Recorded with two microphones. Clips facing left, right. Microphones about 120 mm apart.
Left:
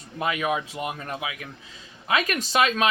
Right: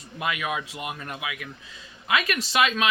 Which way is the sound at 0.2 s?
30° left (ahead or behind).